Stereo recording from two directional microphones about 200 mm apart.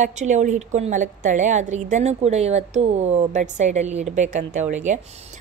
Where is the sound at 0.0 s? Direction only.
35° right (ahead or behind).